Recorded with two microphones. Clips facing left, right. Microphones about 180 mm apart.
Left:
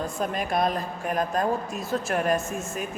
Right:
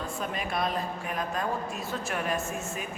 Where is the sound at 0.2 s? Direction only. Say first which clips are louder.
Left 6 dB; 45° left (ahead or behind).